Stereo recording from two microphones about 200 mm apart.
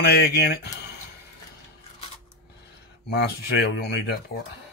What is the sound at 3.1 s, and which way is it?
Speech, 55° left (ahead or behind).